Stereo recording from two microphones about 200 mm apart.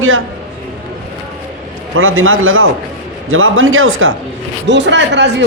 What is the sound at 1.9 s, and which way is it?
A man's voice, 90° right.